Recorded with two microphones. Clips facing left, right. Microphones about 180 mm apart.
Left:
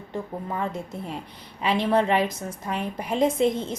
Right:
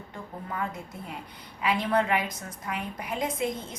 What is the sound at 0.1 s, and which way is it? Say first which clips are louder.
A woman's voice: left 7 dB; 25° left (ahead or behind).